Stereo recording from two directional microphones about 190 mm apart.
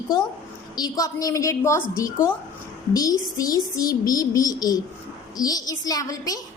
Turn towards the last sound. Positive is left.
turn(degrees=20)  # may be behind; listen again after turning